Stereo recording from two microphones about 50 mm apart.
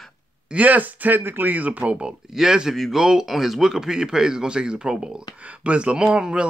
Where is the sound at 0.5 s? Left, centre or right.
Right.